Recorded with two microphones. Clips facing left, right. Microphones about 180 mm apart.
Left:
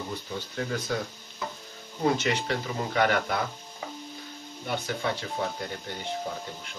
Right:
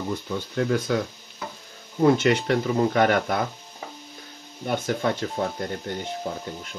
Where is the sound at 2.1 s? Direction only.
55° right (ahead or behind).